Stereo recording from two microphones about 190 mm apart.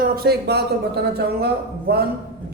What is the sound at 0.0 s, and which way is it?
Speech, 55° right (ahead or behind).